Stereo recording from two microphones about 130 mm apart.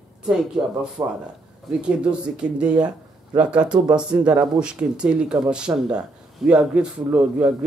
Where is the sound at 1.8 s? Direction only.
5° right (ahead or behind).